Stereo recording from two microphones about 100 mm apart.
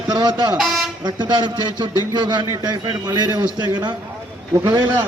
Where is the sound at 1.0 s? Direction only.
50° right (ahead or behind).